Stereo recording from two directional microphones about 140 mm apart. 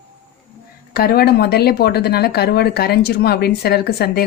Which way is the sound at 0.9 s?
90° left.